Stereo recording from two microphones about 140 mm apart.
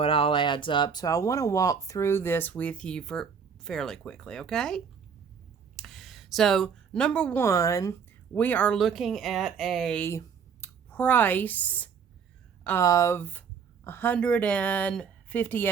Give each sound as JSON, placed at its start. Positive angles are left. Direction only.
{"t": 0.0, "sound": "speech", "side_deg": 40}
{"t": 5.7, "sound": "a sound", "side_deg": 0}
{"t": 7.4, "sound": "speech", "side_deg": 20}
{"t": 8.3, "sound": "speech", "side_deg": 10}
{"t": 8.8, "sound": "speech", "side_deg": 0}
{"t": 10.0, "sound": "speech", "side_deg": 20}
{"t": 12.6, "sound": "speech", "side_deg": 20}